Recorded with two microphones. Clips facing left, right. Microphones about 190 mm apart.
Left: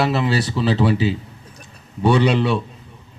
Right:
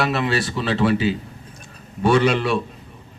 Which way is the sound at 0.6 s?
25° left (ahead or behind).